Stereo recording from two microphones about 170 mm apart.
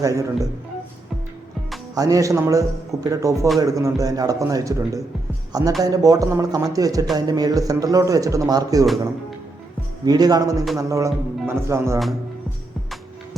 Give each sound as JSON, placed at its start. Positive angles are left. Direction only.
{"t": 0.0, "sound": "speech", "side_deg": -20}
{"t": 2.0, "sound": "speech", "side_deg": -20}
{"t": 10.1, "sound": "speech", "side_deg": -20}